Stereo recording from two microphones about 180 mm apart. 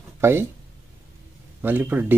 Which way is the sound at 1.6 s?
10° right (ahead or behind).